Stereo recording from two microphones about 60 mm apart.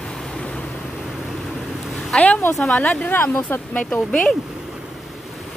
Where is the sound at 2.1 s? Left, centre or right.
Centre.